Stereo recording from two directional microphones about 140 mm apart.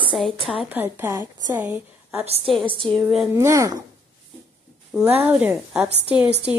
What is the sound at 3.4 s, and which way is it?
Speech, 20° right (ahead or behind).